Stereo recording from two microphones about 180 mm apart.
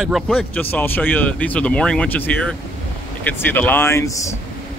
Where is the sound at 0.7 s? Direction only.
10° left (ahead or behind).